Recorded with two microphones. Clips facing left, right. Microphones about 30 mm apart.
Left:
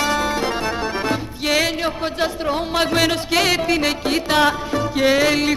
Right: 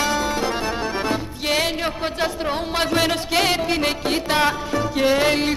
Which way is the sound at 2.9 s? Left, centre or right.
Left.